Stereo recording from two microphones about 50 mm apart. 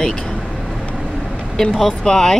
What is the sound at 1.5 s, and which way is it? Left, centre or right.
Speech, centre.